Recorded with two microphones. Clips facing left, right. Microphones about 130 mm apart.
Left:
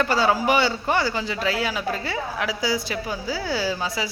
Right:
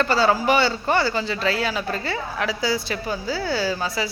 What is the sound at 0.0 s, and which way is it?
A man's voice, 10° left (ahead or behind).